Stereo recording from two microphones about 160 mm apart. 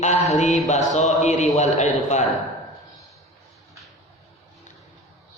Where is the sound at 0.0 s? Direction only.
45° left (ahead or behind).